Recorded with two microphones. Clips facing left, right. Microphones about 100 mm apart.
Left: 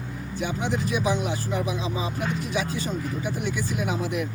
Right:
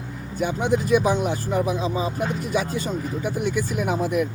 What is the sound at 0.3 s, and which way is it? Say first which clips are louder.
Speech: right 6 dB; 50° right (ahead or behind).